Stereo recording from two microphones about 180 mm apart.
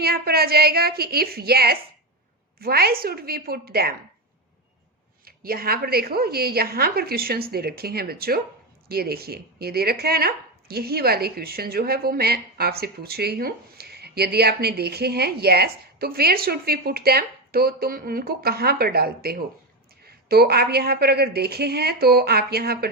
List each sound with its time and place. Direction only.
0.0 s speech: 60° right (ahead or behind)
5.2 s speech: 55° right (ahead or behind)